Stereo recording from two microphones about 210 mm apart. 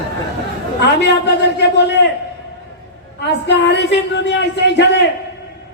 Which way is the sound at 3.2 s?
55° left (ahead or behind).